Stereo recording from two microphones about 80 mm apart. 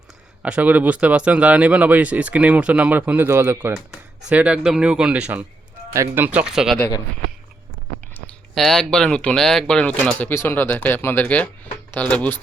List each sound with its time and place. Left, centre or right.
0.4 s speech: centre
4.3 s speech: centre
6.4 s speech: centre
8.5 s speech: centre